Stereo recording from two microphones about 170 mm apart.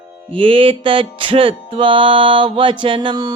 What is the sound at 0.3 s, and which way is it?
Music, 30° right (ahead or behind).